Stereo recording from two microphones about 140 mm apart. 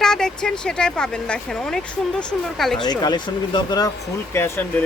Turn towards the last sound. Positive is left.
turn(degrees=15)  # may be behind; listen again after turning